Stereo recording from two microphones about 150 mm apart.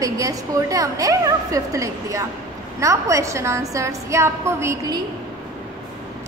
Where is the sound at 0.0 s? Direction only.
20° right (ahead or behind).